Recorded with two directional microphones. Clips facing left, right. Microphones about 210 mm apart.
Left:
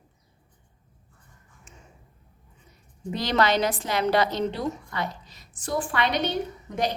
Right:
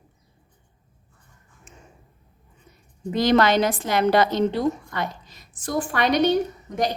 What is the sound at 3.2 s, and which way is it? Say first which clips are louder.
A woman's voice: right 5 dB; 50° right (ahead or behind).